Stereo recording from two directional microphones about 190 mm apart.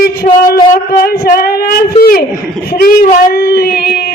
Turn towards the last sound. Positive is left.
turn(degrees=55)  # may be behind; listen again after turning